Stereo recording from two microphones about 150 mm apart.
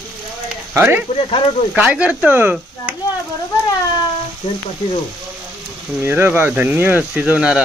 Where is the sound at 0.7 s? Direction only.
15° right (ahead or behind).